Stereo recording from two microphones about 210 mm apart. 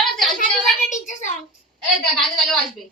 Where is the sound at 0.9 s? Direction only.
35° left (ahead or behind).